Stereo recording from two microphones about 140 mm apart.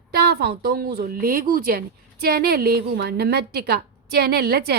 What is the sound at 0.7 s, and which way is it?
Speech, 90° right.